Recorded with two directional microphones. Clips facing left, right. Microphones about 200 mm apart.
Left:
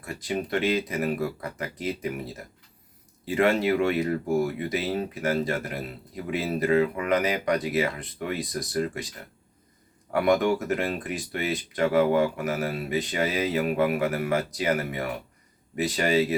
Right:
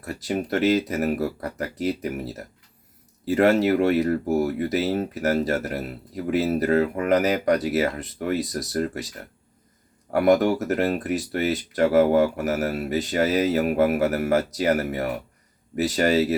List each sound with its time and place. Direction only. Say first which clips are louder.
0.0 s speech: right 3 dB; 40° right (ahead or behind)
10.1 s speech: right 4 dB; 40° right (ahead or behind)